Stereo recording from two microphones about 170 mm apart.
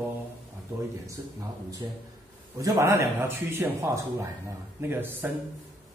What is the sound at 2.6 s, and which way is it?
A man's voice, 15° right (ahead or behind).